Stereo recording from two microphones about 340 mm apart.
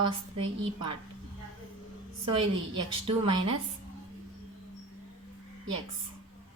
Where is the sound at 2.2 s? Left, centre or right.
Centre.